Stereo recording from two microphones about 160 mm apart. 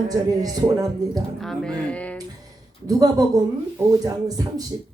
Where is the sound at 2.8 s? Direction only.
25° right (ahead or behind).